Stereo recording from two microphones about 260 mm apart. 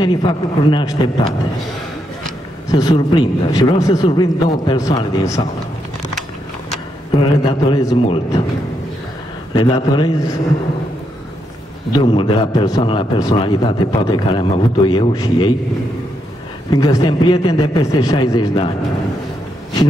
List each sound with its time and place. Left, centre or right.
0.0 s a man's voice: centre
2.7 s a man's voice: centre
7.1 s a man's voice: centre
9.6 s a man's voice: centre
12.0 s a man's voice: centre
16.7 s a man's voice: centre